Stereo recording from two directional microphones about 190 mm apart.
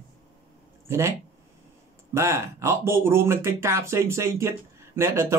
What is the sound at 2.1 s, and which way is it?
A man's voice, 15° right (ahead or behind).